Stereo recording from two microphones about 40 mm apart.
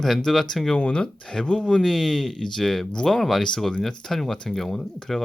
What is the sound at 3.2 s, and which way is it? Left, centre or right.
Speech, centre.